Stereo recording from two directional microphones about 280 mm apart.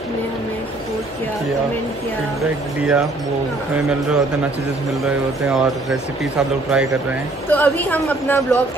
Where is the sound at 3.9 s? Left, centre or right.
Centre.